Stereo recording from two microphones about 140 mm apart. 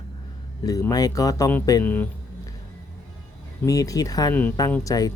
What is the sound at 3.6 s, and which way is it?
Speech, 25° left (ahead or behind).